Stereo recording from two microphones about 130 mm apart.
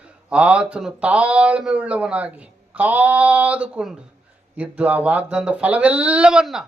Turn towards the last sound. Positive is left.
turn(degrees=-5)  # may be behind; listen again after turning